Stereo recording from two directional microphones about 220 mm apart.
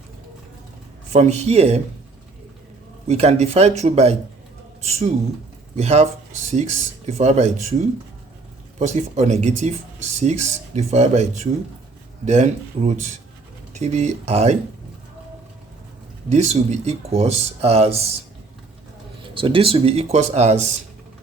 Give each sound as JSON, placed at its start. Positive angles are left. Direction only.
{"t": 1.1, "sound": "speech", "side_deg": -30}
{"t": 3.1, "sound": "speech", "side_deg": -30}
{"t": 8.8, "sound": "speech", "side_deg": -30}
{"t": 16.3, "sound": "speech", "side_deg": -30}
{"t": 19.3, "sound": "speech", "side_deg": -25}